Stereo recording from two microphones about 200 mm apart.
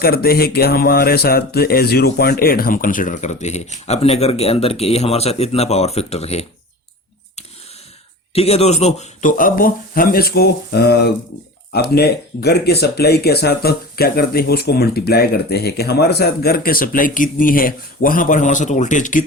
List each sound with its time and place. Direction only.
0.0 s speech: 50° left (ahead or behind); by 6.4 s 30° left (ahead or behind)
8.3 s speech: 30° left (ahead or behind)